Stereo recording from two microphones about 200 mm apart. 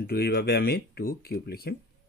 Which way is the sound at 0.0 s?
50° left (ahead or behind).